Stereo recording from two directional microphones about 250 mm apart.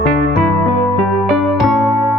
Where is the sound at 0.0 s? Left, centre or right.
Centre.